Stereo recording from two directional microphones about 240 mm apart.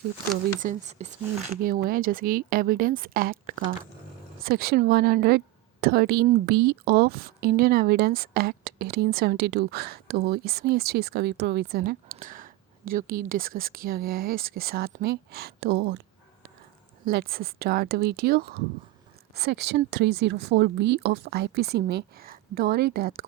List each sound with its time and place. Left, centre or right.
0.6 s speech: right
17.1 s speech: right